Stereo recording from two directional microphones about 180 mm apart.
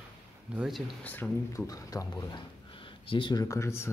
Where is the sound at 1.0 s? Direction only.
10° left (ahead or behind).